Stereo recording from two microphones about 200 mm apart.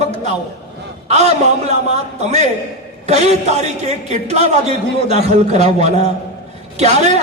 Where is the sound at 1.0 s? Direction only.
35° right (ahead or behind).